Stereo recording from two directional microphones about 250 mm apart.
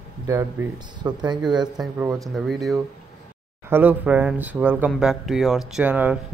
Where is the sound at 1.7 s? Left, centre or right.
Centre.